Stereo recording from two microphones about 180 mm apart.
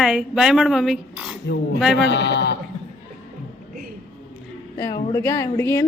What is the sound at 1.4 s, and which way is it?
A man's voice, 75° left (ahead or behind).